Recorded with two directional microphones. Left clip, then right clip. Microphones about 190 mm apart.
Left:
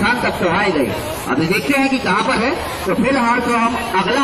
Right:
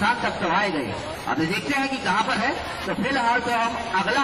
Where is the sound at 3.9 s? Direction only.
35° right (ahead or behind).